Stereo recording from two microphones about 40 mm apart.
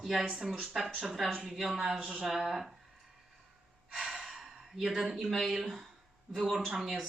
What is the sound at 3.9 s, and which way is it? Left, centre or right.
Breathing, centre.